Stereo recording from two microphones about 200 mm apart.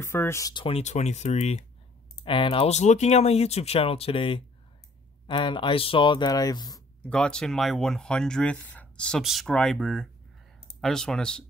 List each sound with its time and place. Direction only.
0.0 s speech: 10° left (ahead or behind)
7.1 s speech: 5° left (ahead or behind)